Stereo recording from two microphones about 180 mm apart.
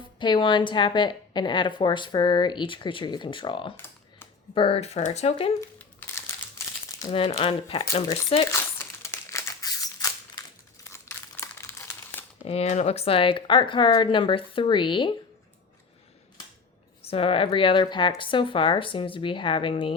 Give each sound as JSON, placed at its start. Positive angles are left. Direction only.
{"t": 0.2, "sound": "speech", "side_deg": 25}
{"t": 5.5, "sound": "a sound", "side_deg": 15}
{"t": 7.0, "sound": "speech", "side_deg": 30}
{"t": 8.4, "sound": "crumpling", "side_deg": 15}
{"t": 12.5, "sound": "speech", "side_deg": 35}
{"t": 17.0, "sound": "speech", "side_deg": 30}